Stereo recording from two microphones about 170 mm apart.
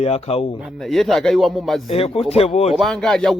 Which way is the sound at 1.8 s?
35° left (ahead or behind).